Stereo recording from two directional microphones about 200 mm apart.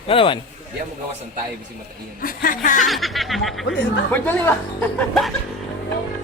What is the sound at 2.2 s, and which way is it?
Speech, 45° left (ahead or behind).